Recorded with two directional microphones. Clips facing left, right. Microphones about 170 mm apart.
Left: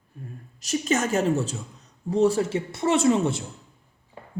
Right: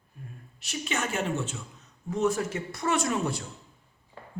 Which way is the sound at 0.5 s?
40° left (ahead or behind).